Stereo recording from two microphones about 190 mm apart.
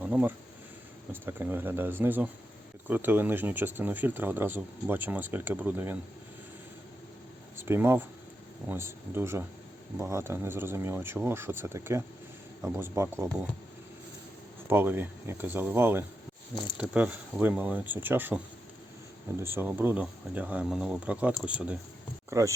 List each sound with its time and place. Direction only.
0.0 s speech: 10° right (ahead or behind)
7.5 s speech: 10° right (ahead or behind)
14.7 s speech: 10° right (ahead or behind)
19.4 s speech: 10° right (ahead or behind)